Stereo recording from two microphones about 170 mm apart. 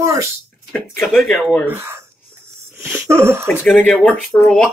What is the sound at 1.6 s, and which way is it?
Speech, 15° right (ahead or behind).